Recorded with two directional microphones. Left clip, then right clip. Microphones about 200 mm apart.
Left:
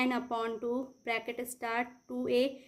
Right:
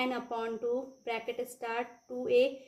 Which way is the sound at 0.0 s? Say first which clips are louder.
Left 1 dB; 40° left (ahead or behind).